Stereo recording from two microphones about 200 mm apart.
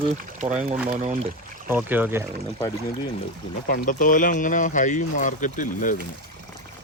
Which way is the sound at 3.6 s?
45° left (ahead or behind).